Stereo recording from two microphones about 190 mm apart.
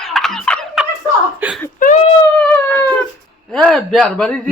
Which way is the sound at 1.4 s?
10° right (ahead or behind).